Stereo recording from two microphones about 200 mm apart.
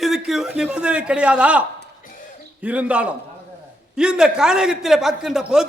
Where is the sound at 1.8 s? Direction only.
40° left (ahead or behind).